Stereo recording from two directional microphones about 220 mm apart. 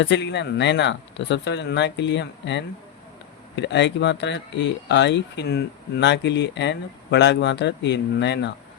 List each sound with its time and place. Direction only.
0.0 s speech: 50° left (ahead or behind)